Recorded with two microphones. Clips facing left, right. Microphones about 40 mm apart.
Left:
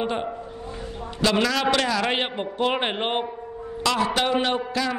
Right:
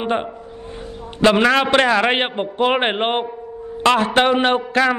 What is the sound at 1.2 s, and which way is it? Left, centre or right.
A man's voice, right.